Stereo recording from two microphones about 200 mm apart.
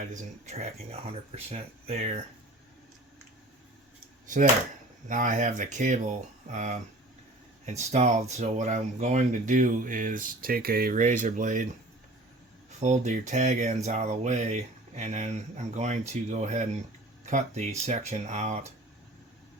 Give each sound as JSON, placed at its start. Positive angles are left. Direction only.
{"t": 0.0, "sound": "speech", "side_deg": -40}
{"t": 5.0, "sound": "speech", "side_deg": -40}
{"t": 12.8, "sound": "speech", "side_deg": -35}